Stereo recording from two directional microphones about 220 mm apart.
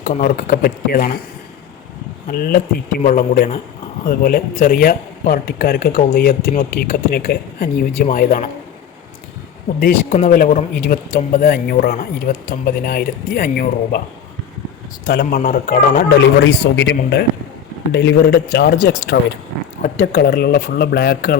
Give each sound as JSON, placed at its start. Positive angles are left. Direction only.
{"t": 0.0, "sound": "a man's voice", "side_deg": 35}
{"t": 2.2, "sound": "a man's voice", "side_deg": 40}
{"t": 9.8, "sound": "a man's voice", "side_deg": 40}
{"t": 15.0, "sound": "a man's voice", "side_deg": 45}